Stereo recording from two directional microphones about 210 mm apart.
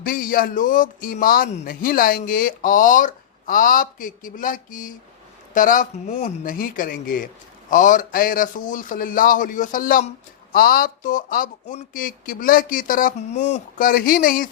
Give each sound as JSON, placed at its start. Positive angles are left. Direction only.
{"t": 0.0, "sound": "speech", "side_deg": 40}